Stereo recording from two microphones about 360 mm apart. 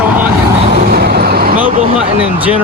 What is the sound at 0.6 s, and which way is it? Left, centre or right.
Vehicle, right.